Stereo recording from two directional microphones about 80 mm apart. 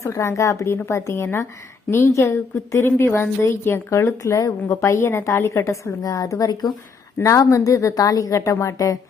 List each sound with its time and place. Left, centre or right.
0.0 s a woman's voice: left
7.2 s a woman's voice: left